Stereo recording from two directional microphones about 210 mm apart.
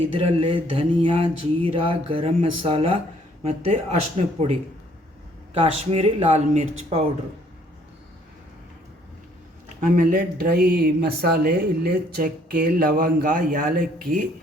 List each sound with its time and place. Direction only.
0.1 s mantra: 25° right (ahead or behind)
4.2 s speech: 30° right (ahead or behind)
5.5 s mantra: 30° right (ahead or behind)
9.8 s speech: 40° right (ahead or behind)